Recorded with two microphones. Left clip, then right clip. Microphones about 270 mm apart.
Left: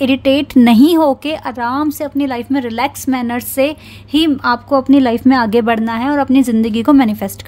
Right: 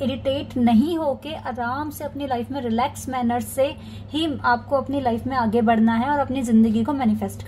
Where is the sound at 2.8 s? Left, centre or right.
Left.